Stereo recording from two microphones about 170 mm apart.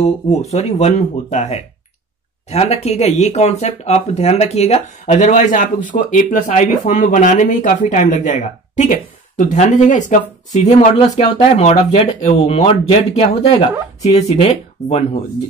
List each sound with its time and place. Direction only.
0.0 s speech: 40° left (ahead or behind)